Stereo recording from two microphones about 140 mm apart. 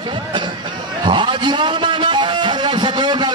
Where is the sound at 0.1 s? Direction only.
35° right (ahead or behind).